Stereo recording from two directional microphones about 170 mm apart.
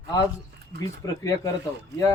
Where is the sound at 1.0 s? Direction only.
20° left (ahead or behind).